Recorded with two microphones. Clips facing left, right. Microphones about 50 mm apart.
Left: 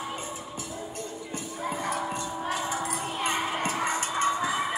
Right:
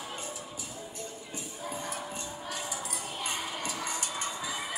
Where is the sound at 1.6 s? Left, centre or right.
Left.